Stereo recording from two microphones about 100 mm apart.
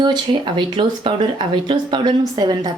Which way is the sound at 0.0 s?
50° right (ahead or behind).